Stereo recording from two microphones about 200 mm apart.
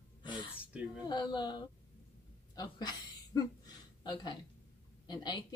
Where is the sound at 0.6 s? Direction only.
5° right (ahead or behind).